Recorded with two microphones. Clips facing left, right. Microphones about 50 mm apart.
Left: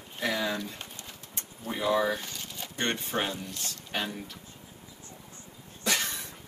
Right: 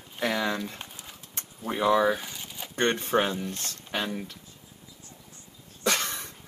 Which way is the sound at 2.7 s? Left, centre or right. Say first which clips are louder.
Right 6 dB; right.